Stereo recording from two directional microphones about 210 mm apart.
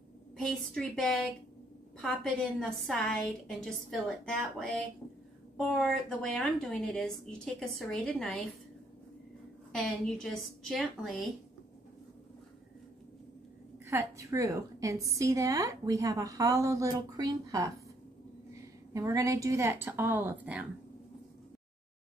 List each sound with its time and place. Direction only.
0.4 s a woman's voice: 5° left (ahead or behind)
9.7 s a woman's voice: centre (ahead or behind)
13.8 s a woman's voice: 15° right (ahead or behind)
18.9 s a woman's voice: 15° right (ahead or behind)